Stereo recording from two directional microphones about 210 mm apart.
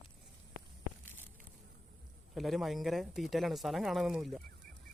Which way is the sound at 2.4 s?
Centre (ahead or behind).